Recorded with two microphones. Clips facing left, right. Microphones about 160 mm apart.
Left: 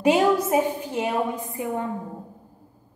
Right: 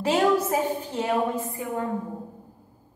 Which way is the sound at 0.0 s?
15° left (ahead or behind).